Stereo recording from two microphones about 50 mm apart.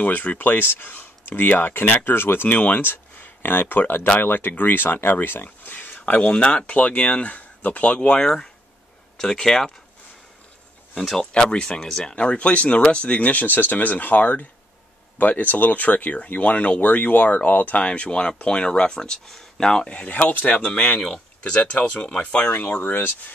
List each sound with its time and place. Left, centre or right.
0.0 s speech: left
2.5 s speech: left
6.2 s speech: centre
6.5 s speech: left
9.2 s speech: centre
11.0 s speech: centre
11.5 s speech: centre; by 17.7 s left
17.7 s speech: left
19.9 s speech: left
22.6 s speech: left